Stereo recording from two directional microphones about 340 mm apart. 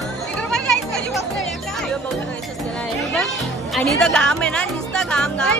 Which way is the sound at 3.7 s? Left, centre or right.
Centre.